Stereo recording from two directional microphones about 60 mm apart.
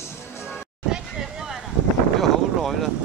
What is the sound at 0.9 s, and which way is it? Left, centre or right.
Vehicle, centre.